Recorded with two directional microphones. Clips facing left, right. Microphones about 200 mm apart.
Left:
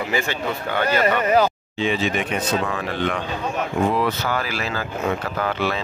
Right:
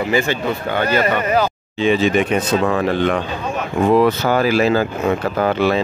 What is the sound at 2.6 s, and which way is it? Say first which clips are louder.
Speech: right 7 dB; 50° right (ahead or behind).